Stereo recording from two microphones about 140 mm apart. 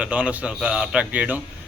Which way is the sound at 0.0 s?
10° right (ahead or behind).